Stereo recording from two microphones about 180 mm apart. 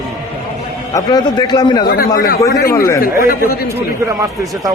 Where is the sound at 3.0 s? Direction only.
55° left (ahead or behind).